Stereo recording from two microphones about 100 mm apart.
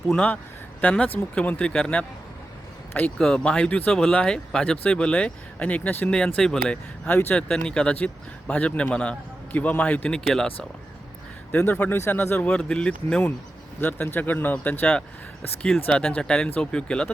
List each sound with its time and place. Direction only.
0.1 s speech: 10° left (ahead or behind)
3.2 s speech: 5° left (ahead or behind)
7.1 s speech: 20° left (ahead or behind)
7.3 s speech: 5° left (ahead or behind)
11.5 s speech: 15° left (ahead or behind)